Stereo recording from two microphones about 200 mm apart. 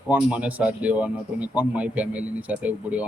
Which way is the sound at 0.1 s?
5° right (ahead or behind).